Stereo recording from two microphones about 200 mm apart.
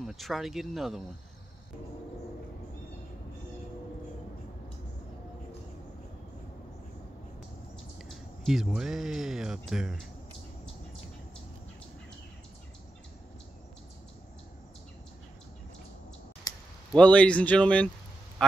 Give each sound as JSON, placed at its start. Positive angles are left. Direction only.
{"t": 0.0, "sound": "speech", "side_deg": 0}
{"t": 8.0, "sound": "speech", "side_deg": 0}
{"t": 16.5, "sound": "clicking", "side_deg": 20}
{"t": 16.9, "sound": "speech", "side_deg": 5}